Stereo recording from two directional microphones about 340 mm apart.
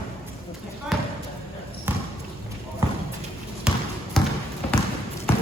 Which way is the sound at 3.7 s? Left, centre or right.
Centre.